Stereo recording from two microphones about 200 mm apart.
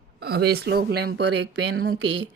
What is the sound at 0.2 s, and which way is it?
Speech, 55° right (ahead or behind).